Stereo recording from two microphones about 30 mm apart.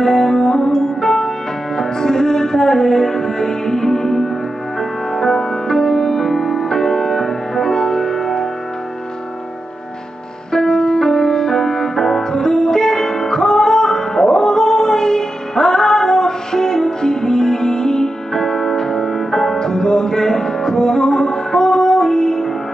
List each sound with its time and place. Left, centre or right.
0.0 s music: left
10.5 s music: left